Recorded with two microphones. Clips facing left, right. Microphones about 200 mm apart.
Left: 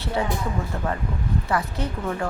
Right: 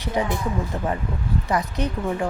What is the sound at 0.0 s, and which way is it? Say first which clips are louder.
Speech: right 1 dB; 15° right (ahead or behind).